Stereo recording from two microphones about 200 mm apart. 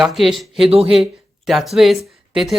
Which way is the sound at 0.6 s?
30° right (ahead or behind).